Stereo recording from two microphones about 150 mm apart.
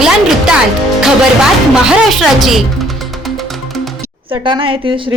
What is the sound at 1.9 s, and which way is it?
Speech, centre (ahead or behind).